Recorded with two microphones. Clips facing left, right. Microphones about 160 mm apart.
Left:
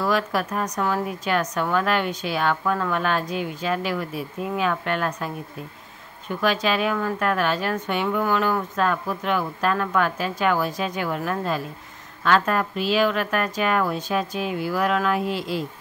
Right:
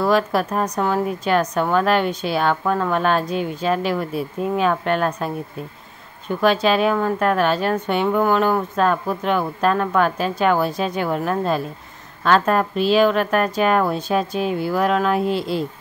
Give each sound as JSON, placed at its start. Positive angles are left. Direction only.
{"t": 0.0, "sound": "a woman's voice", "side_deg": -30}
{"t": 6.4, "sound": "a woman's voice", "side_deg": -30}